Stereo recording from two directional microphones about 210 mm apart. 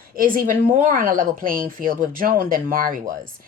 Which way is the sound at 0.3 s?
40° right (ahead or behind).